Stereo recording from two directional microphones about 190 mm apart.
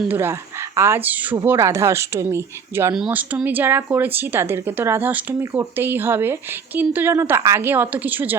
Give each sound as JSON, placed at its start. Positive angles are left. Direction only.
{"t": 0.0, "sound": "speech", "side_deg": -10}